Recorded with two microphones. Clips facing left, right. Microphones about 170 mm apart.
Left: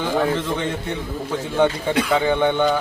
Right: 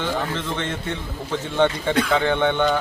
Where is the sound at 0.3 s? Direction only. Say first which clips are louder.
Left 3 dB; 10° left (ahead or behind).